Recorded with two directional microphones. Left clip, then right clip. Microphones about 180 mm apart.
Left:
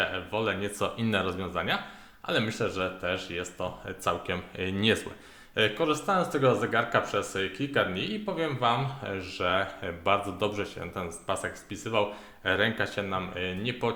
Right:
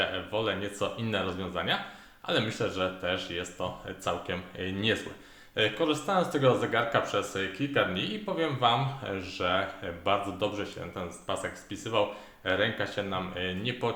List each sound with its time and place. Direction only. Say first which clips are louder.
0.0 s speech: left 1 dB; 20° left (ahead or behind)